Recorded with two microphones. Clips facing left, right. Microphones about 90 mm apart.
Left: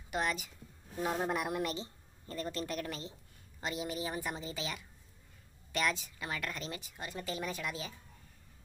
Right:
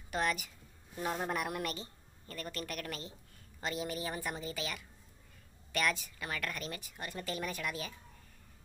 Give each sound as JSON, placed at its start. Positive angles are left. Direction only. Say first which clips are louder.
{"t": 0.1, "sound": "speech", "louder": "right 1 dB", "side_deg": 20}
{"t": 1.0, "sound": "speech", "louder": "left 2 dB", "side_deg": 5}
{"t": 1.3, "sound": "a woman's voice", "louder": "left 2 dB", "side_deg": 20}